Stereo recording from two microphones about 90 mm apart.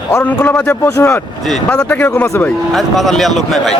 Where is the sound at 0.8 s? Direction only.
30° left (ahead or behind).